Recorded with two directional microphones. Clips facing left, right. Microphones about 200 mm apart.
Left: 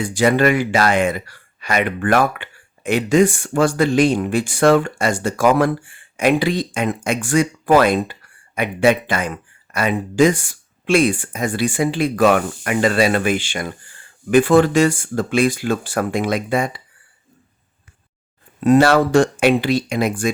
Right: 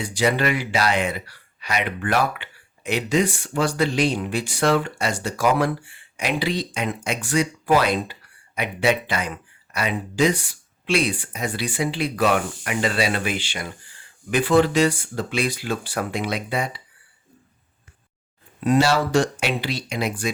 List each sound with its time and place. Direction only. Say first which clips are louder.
0.0 s speech: left 6 dB; 50° left (ahead or behind)
18.6 s speech: left 6 dB; 50° left (ahead or behind)